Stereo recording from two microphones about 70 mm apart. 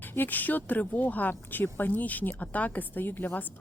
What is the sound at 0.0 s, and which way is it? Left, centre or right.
Speech, left.